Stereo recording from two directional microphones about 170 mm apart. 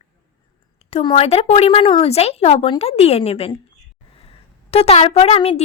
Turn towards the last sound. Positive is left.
turn(degrees=35)  # may be behind; listen again after turning